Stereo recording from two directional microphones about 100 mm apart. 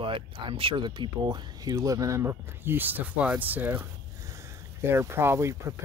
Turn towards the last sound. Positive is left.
turn(degrees=-25)  # may be behind; listen again after turning